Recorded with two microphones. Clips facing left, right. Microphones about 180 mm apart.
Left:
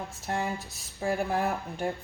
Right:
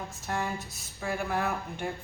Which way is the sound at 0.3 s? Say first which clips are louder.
Left 1 dB; 30° left (ahead or behind).